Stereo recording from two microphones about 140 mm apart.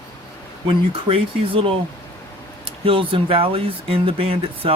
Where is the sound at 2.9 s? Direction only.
40° right (ahead or behind).